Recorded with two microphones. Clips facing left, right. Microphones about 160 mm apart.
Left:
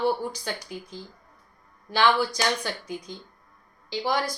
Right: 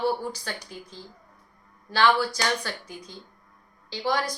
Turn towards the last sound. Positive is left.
turn(degrees=15)  # may be behind; listen again after turning